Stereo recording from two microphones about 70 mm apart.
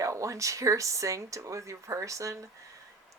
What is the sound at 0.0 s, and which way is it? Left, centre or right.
Speech, right.